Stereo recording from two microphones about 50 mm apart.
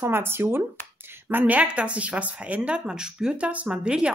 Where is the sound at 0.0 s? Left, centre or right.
Right.